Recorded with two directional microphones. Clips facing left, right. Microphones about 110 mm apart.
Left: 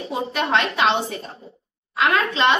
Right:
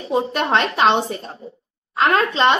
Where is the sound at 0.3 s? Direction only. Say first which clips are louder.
Right 2 dB; 40° right (ahead or behind).